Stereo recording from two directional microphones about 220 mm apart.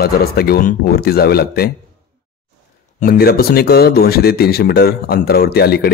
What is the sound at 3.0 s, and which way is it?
Speech, 45° left (ahead or behind).